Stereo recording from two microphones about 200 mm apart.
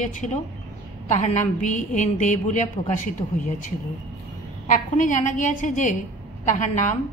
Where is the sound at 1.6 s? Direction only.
40° left (ahead or behind).